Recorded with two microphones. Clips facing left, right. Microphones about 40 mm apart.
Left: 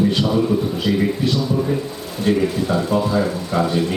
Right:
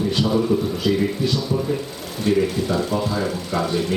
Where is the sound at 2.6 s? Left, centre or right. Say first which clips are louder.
Left 3 dB; left.